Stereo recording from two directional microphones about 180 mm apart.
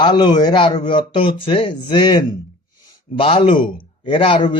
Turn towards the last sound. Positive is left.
turn(degrees=30)  # may be behind; listen again after turning